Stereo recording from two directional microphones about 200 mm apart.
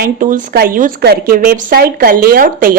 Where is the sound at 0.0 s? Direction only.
40° right (ahead or behind).